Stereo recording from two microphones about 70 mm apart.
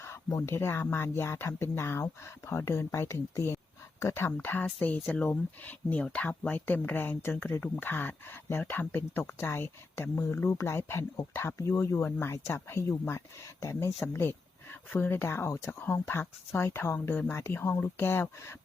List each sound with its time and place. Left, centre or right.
0.3 s speech: left
4.8 s speech: left